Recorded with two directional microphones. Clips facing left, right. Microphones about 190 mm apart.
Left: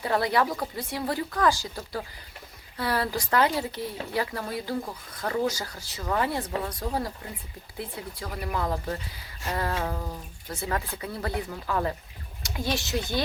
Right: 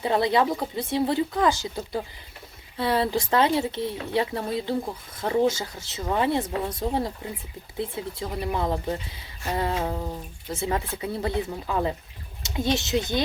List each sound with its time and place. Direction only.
0.0 s speech: 20° right (ahead or behind)